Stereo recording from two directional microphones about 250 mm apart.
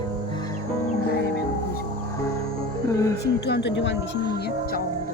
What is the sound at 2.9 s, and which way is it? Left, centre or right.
Speech, centre.